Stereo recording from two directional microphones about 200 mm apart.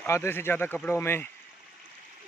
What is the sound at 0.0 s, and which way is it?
Speech, 10° left (ahead or behind).